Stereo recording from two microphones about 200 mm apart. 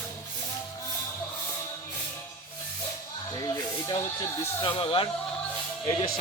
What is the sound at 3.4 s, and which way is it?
Music, 20° left (ahead or behind).